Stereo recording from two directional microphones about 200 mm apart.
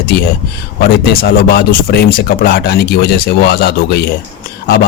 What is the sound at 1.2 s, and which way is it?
Speech, 50° left (ahead or behind).